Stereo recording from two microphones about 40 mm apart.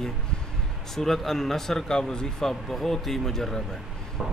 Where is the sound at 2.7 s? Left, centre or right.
Centre.